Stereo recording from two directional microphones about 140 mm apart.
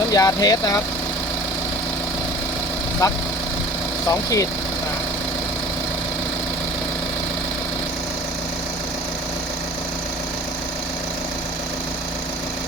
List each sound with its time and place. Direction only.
0.1 s speech: 25° left (ahead or behind)
3.0 s speech: 25° left (ahead or behind)